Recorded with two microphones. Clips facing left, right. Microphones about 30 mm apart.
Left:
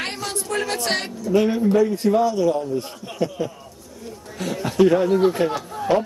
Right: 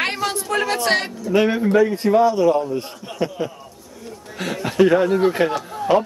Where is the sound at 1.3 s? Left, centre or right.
Right.